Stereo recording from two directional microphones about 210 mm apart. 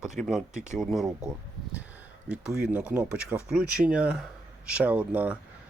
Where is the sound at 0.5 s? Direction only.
35° right (ahead or behind).